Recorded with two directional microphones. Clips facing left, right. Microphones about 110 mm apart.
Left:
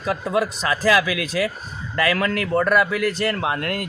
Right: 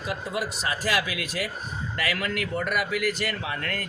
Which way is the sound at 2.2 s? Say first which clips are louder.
Left 8 dB; 75° left (ahead or behind).